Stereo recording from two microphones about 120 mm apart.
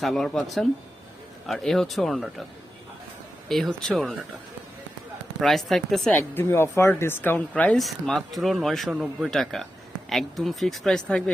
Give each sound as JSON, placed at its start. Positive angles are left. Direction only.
{"t": 0.0, "sound": "speech", "side_deg": 5}
{"t": 3.8, "sound": "speech", "side_deg": 0}
{"t": 5.4, "sound": "speech", "side_deg": 0}
{"t": 6.1, "sound": "speech", "side_deg": 20}